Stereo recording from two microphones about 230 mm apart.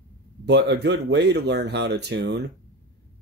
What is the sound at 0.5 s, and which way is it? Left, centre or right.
Speech, right.